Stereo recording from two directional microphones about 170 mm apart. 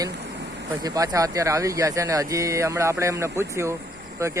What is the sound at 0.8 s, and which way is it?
Speech, 20° right (ahead or behind).